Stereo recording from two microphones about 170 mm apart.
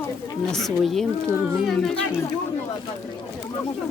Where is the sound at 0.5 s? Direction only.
Centre (ahead or behind).